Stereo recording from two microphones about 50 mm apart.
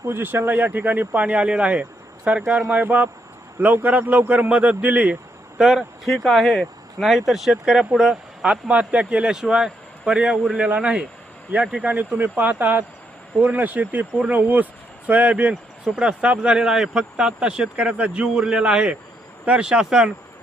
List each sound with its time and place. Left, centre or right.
0.0 s speech: right
5.5 s speech: centre
6.1 s speech: centre
7.0 s speech: centre; by 9.4 s right
9.4 s speech: centre